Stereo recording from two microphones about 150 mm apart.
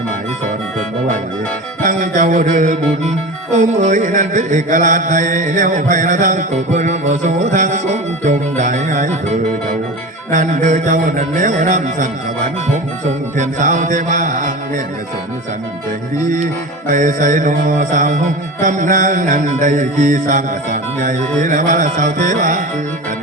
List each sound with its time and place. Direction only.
1.8 s music: 60° right (ahead or behind)
10.3 s music: 60° right (ahead or behind)
13.3 s music: 60° right (ahead or behind)
16.9 s music: 60° right (ahead or behind)